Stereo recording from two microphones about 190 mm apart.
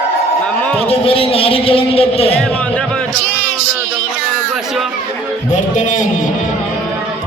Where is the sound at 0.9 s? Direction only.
30° left (ahead or behind).